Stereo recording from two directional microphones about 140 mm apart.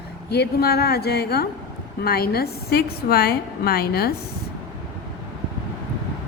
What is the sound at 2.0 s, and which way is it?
A woman's voice, 90° left.